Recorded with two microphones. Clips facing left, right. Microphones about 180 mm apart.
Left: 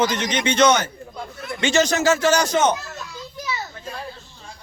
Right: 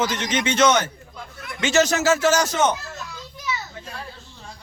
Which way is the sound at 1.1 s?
35° left (ahead or behind).